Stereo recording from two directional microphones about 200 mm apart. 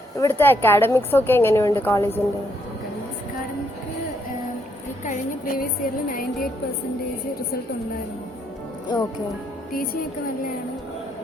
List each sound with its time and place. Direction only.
0.2 s a woman's voice: 10° left (ahead or behind)
5.0 s a woman's voice: 45° left (ahead or behind)